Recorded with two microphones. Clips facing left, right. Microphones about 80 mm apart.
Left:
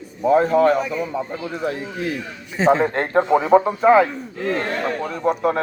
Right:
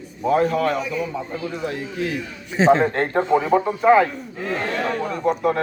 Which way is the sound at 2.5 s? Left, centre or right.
Centre.